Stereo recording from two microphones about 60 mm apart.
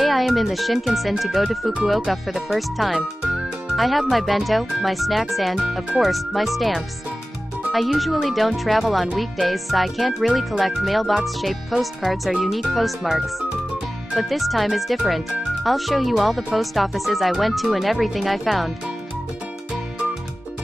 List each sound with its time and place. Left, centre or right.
0.0 s speech: centre